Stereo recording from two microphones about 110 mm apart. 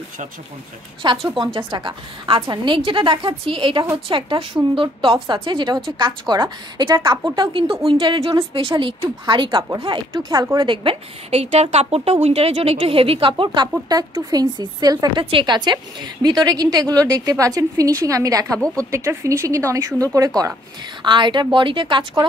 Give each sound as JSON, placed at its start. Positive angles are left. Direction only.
{"t": 1.0, "sound": "a woman's voice", "side_deg": -45}
{"t": 10.3, "sound": "a woman's voice", "side_deg": -35}
{"t": 10.7, "sound": "a woman's voice", "side_deg": -50}
{"t": 11.2, "sound": "a woman's voice", "side_deg": -70}
{"t": 21.0, "sound": "a woman's voice", "side_deg": -45}